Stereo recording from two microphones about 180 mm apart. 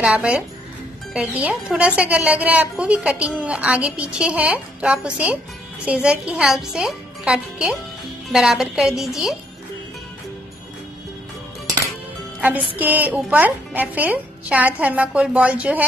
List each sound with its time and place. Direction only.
0.0 s a woman's voice: 5° right (ahead or behind)
12.4 s music: 10° right (ahead or behind)
12.7 s a woman's voice: 10° right (ahead or behind)